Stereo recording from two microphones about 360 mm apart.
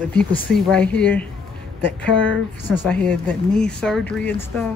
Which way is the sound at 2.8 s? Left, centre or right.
Centre.